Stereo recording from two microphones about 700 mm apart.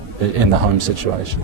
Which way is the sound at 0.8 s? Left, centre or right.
Right.